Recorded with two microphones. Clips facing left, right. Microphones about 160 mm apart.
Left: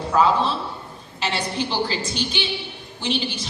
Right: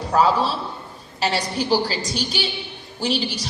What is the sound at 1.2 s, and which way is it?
A man's voice, 40° right (ahead or behind).